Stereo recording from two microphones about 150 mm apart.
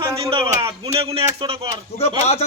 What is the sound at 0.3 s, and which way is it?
Speech, 35° right (ahead or behind).